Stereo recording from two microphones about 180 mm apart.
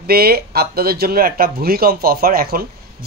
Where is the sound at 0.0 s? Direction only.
60° right (ahead or behind).